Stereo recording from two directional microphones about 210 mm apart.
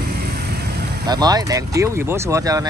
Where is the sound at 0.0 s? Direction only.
50° right (ahead or behind).